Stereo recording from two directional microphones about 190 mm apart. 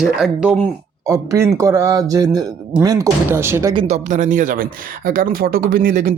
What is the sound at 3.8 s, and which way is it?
Speech, 40° right (ahead or behind).